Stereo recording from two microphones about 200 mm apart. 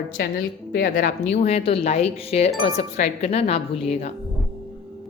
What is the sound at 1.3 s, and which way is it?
Speech, 35° left (ahead or behind).